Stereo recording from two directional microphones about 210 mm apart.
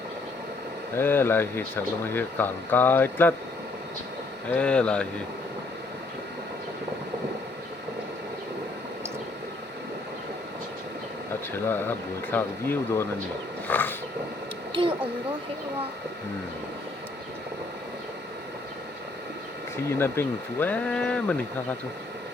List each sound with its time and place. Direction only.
0.9 s speech: 10° left (ahead or behind)
4.4 s speech: 5° left (ahead or behind)
11.5 s speech: 10° left (ahead or behind)
14.7 s a sound: 25° right (ahead or behind)
19.7 s speech: 10° left (ahead or behind)